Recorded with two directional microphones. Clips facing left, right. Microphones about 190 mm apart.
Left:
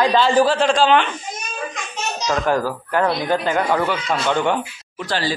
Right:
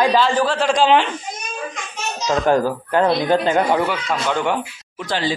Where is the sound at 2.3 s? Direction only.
20° right (ahead or behind).